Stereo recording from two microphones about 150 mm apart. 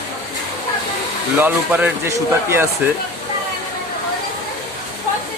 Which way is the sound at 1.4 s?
10° right (ahead or behind).